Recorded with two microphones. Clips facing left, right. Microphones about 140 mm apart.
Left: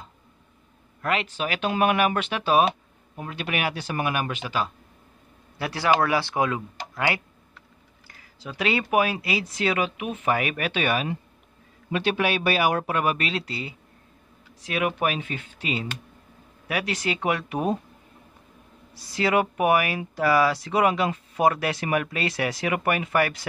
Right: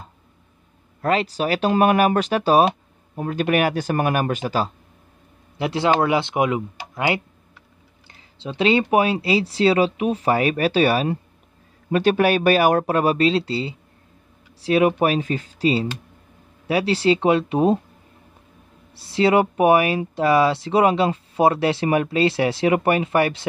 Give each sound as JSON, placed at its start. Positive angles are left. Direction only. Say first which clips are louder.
{"t": 1.0, "sound": "speech", "louder": "right 6 dB", "side_deg": -35}
{"t": 5.6, "sound": "speech", "louder": "right 3 dB", "side_deg": -20}
{"t": 8.1, "sound": "speech", "louder": "right 6 dB", "side_deg": -25}
{"t": 18.9, "sound": "speech", "louder": "right 6 dB", "side_deg": -30}